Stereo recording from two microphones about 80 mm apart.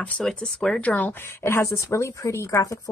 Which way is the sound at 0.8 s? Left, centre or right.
Left.